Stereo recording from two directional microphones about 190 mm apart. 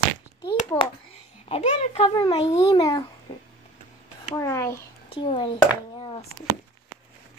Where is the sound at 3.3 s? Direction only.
25° left (ahead or behind).